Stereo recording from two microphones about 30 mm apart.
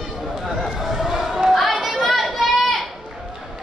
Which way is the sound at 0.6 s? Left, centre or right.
Centre.